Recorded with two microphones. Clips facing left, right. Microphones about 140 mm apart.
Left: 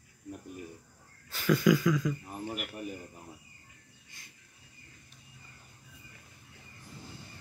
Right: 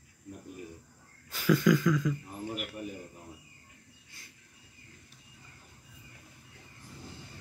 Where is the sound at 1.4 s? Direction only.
Centre (ahead or behind).